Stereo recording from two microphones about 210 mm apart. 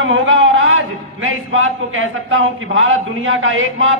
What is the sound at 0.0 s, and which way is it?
A man's voice, 65° right (ahead or behind).